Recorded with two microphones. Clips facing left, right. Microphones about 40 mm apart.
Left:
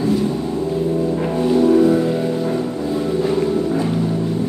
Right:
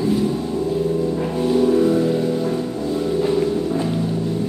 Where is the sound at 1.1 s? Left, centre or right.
Left.